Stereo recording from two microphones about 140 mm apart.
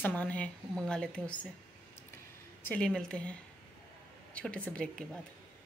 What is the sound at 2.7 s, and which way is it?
Speech, 10° left (ahead or behind).